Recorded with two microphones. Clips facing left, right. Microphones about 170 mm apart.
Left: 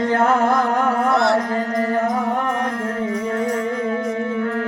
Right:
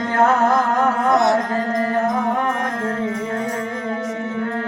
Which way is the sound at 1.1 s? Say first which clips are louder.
Right 3 dB; 15° right (ahead or behind).